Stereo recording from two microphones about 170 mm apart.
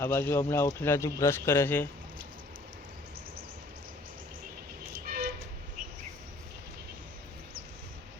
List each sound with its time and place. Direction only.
0.0 s speech: 15° left (ahead or behind)
5.0 s vehicle: 60° right (ahead or behind)